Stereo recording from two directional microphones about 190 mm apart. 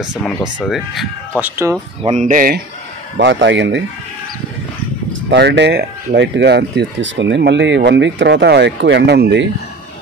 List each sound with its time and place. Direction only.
0.2 s speech: centre (ahead or behind)
2.0 s speech: 40° right (ahead or behind)
3.2 s speech: 75° right (ahead or behind)
5.3 s speech: 65° right (ahead or behind)